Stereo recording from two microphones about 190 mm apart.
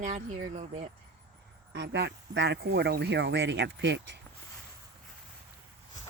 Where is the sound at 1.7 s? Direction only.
65° right (ahead or behind).